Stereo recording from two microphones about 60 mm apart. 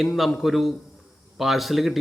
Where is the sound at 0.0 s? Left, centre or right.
Centre.